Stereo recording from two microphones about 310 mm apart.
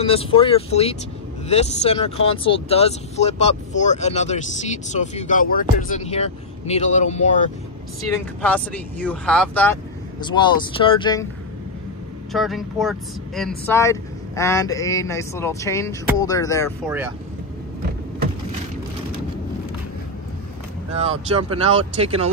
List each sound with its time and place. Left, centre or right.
0.0 s speech: centre
8.1 s speech: centre
12.3 s speech: centre
20.9 s speech: centre